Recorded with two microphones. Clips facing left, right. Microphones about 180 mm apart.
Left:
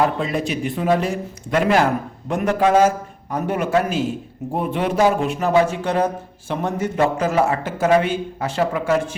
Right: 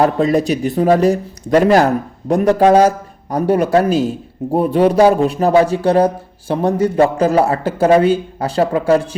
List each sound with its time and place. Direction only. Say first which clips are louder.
0.0 s a man's voice: right 7 dB; 40° right (ahead or behind)